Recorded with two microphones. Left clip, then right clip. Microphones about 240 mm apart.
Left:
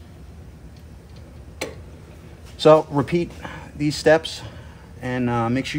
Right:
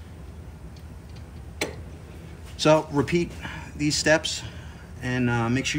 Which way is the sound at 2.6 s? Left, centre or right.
Left.